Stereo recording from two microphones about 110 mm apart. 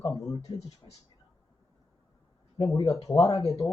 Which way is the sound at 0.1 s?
40° left (ahead or behind).